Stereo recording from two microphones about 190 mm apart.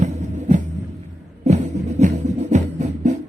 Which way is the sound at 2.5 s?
40° right (ahead or behind).